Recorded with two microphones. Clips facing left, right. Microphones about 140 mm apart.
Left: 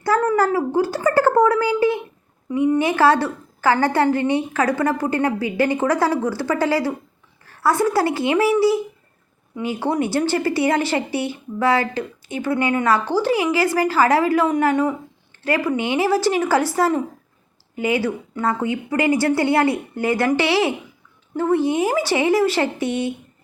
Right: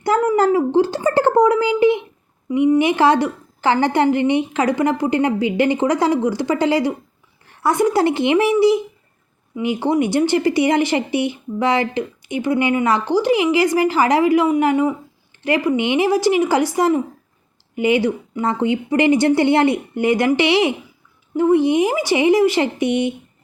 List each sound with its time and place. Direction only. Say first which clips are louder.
0.0 s a woman's voice: right 2 dB; 15° right (ahead or behind)